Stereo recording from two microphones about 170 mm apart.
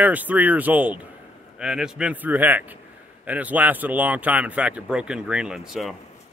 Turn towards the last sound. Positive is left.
turn(degrees=-5)  # may be behind; listen again after turning